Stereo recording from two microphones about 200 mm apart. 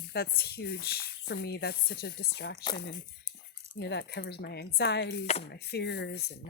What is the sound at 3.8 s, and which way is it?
Speech, 60° left (ahead or behind).